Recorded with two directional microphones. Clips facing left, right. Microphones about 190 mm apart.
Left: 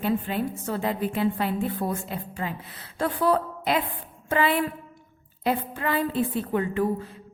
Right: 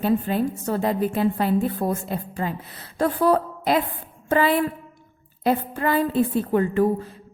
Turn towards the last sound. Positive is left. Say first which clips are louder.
# right 5 dB
turn(degrees=-45)  # may be behind; listen again after turning